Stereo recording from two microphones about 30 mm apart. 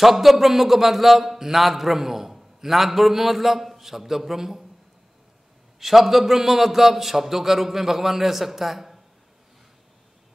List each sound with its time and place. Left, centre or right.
0.0 s a man's voice: centre
5.8 s a man's voice: centre